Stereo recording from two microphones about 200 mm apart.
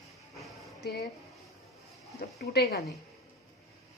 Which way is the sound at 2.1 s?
50° left (ahead or behind).